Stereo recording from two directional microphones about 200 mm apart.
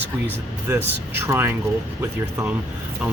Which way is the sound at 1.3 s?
10° right (ahead or behind).